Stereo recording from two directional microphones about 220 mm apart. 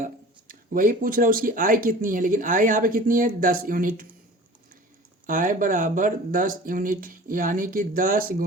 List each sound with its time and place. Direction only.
0.0 s speech: 40° right (ahead or behind)
5.2 s speech: 40° right (ahead or behind)